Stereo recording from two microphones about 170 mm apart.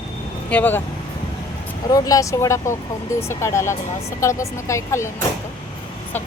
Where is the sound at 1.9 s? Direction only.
20° left (ahead or behind).